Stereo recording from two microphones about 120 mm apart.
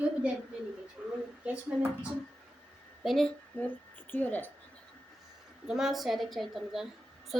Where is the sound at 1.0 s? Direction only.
10° right (ahead or behind).